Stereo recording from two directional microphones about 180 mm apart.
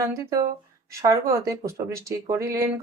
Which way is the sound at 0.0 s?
20° right (ahead or behind).